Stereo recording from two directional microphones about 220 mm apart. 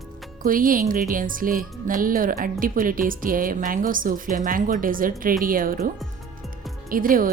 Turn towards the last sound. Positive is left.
turn(degrees=-40)  # may be behind; listen again after turning